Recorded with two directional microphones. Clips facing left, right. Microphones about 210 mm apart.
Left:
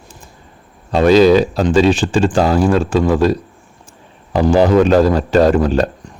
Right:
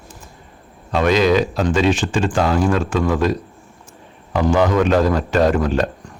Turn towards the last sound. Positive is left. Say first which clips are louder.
# left 4 dB
turn(degrees=35)  # may be behind; listen again after turning